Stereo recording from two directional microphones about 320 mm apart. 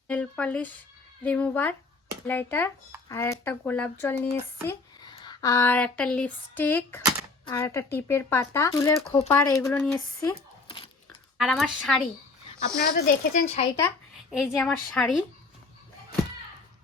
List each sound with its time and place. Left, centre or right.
0.1 s speech: centre
11.3 s speech: centre
12.8 s speech: left
13.7 s speech: centre